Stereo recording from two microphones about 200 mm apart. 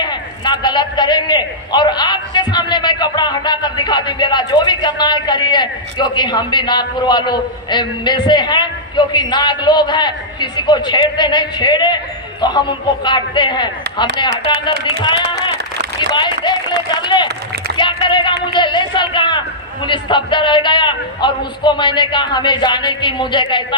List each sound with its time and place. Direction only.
0.0 s a man's voice: 20° left (ahead or behind)
17.7 s a sound: 25° left (ahead or behind)
18.4 s a man's voice: 25° left (ahead or behind)